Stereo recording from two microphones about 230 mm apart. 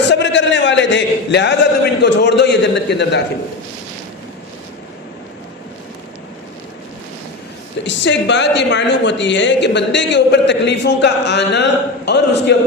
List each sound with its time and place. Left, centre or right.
0.0 s a man's voice: left
7.9 s a man's voice: left